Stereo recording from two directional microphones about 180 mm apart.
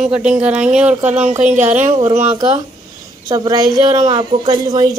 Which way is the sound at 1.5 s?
40° right (ahead or behind).